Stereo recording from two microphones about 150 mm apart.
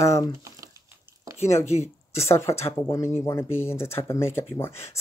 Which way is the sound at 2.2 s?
20° left (ahead or behind).